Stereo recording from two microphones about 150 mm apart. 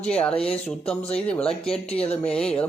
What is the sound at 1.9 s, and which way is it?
Speech, 45° left (ahead or behind).